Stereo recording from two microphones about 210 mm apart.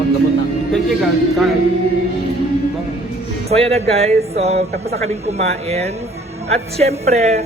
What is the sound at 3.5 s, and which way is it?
A man's voice, 30° right (ahead or behind).